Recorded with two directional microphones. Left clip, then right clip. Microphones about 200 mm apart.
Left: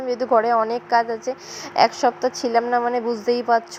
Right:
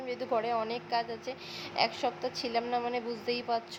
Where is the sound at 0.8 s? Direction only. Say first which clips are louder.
Left 13 dB; 15° left (ahead or behind).